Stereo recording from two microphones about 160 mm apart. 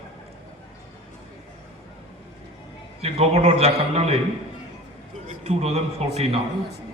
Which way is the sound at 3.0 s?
40° right (ahead or behind).